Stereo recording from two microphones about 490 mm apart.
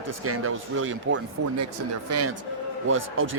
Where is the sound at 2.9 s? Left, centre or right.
Right.